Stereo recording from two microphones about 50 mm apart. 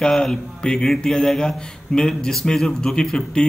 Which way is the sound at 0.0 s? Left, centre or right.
Centre.